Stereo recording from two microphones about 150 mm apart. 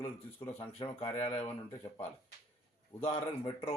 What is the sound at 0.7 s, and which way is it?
Speech, 35° left (ahead or behind).